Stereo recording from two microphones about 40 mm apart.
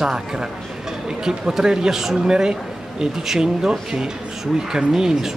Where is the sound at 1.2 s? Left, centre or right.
Centre.